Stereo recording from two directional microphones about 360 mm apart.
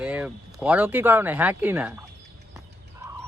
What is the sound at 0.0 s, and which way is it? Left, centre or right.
Speech, centre.